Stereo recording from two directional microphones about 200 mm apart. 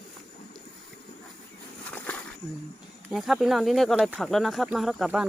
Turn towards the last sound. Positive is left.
turn(degrees=0)  # may be behind; listen again after turning